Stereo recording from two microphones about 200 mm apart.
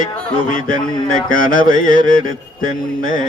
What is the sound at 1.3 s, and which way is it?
Mantra, 45° left (ahead or behind).